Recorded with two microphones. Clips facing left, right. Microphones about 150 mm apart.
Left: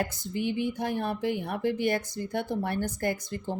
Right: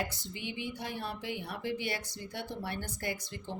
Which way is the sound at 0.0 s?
50° left (ahead or behind).